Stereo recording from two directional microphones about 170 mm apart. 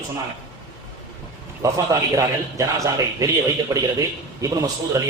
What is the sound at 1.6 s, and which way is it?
Speech, 20° right (ahead or behind).